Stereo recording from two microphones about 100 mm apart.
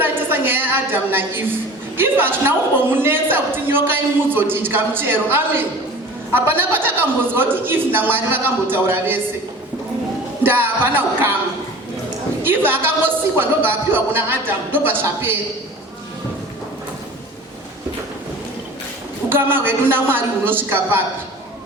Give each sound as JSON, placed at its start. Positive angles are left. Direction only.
{"t": 0.0, "sound": "a woman's voice", "side_deg": -20}
{"t": 10.4, "sound": "a woman's voice", "side_deg": -20}
{"t": 12.4, "sound": "a woman's voice", "side_deg": -20}
{"t": 19.3, "sound": "a woman's voice", "side_deg": -20}